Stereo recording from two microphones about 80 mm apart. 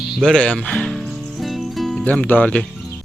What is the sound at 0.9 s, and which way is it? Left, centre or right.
Music, centre.